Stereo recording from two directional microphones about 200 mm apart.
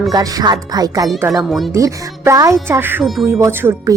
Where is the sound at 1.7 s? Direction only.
15° right (ahead or behind).